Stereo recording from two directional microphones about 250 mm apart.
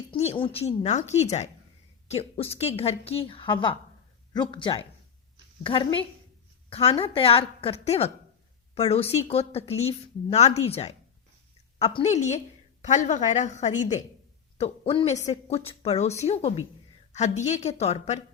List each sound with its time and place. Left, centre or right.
0.1 s a woman's voice: left